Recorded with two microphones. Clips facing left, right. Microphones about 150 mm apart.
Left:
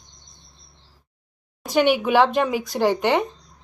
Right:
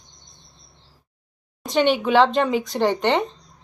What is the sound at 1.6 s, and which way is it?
A woman's voice, 10° left (ahead or behind).